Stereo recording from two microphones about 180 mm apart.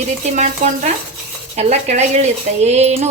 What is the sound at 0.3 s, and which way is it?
Speech, 40° right (ahead or behind).